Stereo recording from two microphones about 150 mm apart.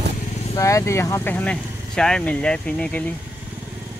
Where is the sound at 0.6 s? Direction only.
20° left (ahead or behind).